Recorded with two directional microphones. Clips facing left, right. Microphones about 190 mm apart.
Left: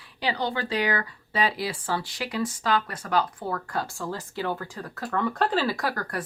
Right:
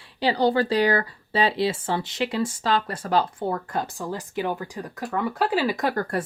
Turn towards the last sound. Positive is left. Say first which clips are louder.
# right 5 dB
turn(degrees=-25)  # may be behind; listen again after turning